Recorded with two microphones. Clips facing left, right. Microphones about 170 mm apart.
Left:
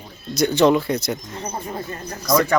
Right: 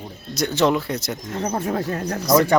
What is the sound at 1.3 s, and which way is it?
Speech, 80° right.